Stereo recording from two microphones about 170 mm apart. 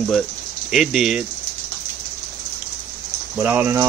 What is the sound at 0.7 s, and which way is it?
Speech, centre (ahead or behind).